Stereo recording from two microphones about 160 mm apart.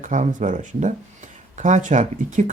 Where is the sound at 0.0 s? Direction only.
50° right (ahead or behind).